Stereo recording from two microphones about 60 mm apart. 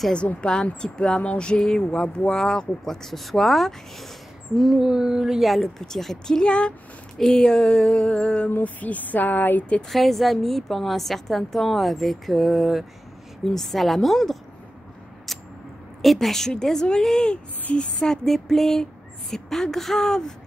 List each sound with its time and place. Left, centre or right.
0.4 s a woman's voice: centre
4.8 s a woman's voice: centre
8.5 s speech: left
9.8 s a woman's voice: centre
15.3 s a sound: centre
16.0 s speech: centre